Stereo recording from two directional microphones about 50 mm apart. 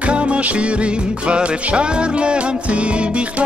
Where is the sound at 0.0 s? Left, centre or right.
Right.